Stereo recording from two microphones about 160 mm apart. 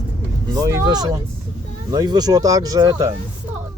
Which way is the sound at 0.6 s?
25° right (ahead or behind).